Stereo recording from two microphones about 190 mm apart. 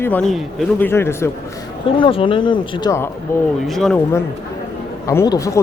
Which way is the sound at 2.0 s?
25° left (ahead or behind).